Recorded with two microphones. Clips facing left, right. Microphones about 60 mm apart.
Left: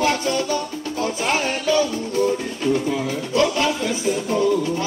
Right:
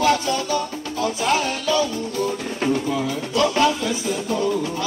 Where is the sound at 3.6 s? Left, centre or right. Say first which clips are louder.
Right 1 dB; left.